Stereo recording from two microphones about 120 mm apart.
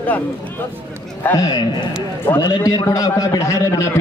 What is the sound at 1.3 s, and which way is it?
A man's voice, 30° left (ahead or behind).